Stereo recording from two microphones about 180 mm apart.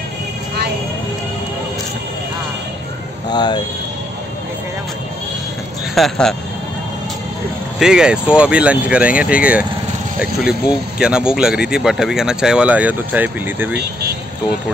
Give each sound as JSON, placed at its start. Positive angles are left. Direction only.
{"t": 3.3, "sound": "speech", "side_deg": 25}
{"t": 5.9, "sound": "speech", "side_deg": 0}
{"t": 7.8, "sound": "speech", "side_deg": -5}
{"t": 11.0, "sound": "speech", "side_deg": -5}